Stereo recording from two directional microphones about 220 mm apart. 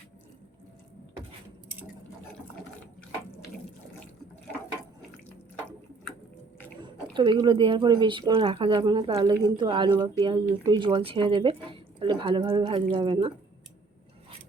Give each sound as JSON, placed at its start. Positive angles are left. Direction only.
{"t": 6.8, "sound": "speech", "side_deg": -20}